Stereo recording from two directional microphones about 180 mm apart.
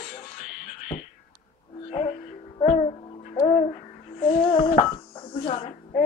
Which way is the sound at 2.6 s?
35° left (ahead or behind).